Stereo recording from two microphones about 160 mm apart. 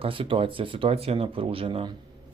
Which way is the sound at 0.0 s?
35° right (ahead or behind).